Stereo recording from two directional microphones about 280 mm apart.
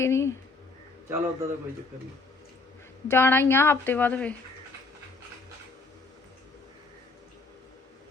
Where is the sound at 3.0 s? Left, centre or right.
Centre.